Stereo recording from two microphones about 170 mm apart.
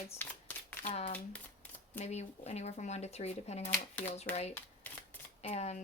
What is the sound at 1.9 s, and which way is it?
Speech, 40° left (ahead or behind).